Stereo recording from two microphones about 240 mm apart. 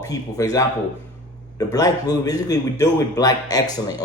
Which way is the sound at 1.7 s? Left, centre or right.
Centre.